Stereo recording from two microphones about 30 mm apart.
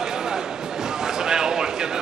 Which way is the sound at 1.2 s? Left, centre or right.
Right.